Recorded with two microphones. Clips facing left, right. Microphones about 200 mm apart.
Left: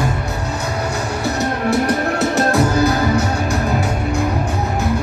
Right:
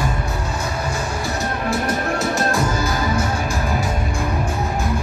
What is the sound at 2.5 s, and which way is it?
Music, 65° left (ahead or behind).